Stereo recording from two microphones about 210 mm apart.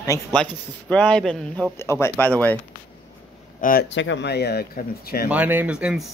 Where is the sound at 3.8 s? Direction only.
60° left (ahead or behind).